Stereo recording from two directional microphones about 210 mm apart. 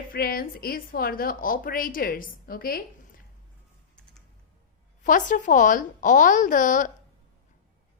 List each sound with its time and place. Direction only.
0.1 s a woman's voice: 45° left (ahead or behind)
5.0 s a woman's voice: 40° left (ahead or behind)